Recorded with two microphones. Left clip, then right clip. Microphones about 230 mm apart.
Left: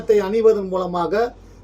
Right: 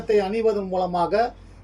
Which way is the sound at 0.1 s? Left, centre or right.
Centre.